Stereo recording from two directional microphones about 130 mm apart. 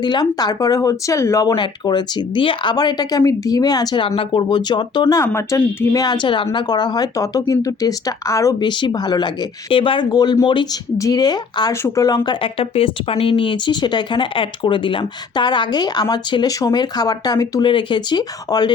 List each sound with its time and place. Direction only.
0.0 s speech: 35° left (ahead or behind)
17.7 s speech: 40° left (ahead or behind)